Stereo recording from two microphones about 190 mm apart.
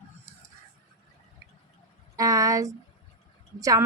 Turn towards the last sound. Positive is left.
turn(degrees=-15)  # may be behind; listen again after turning